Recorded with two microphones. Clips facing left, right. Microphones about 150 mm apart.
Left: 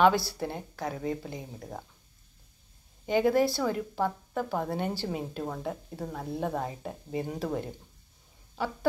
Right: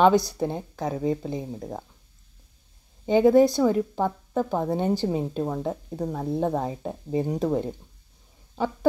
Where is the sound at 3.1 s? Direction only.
20° right (ahead or behind).